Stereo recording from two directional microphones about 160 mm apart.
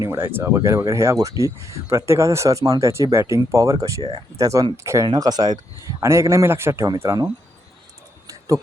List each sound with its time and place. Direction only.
0.0 s speech: 15° right (ahead or behind)